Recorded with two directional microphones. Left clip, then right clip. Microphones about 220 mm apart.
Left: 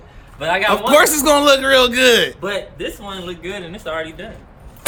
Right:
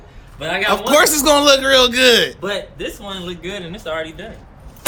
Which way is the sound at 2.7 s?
20° right (ahead or behind).